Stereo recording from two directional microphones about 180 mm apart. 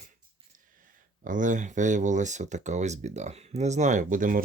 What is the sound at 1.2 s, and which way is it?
Speech, 45° right (ahead or behind).